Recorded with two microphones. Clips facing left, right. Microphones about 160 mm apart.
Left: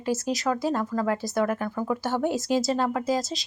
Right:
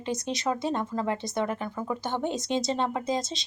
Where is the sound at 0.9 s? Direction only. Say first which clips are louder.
Left 3 dB; 25° right (ahead or behind).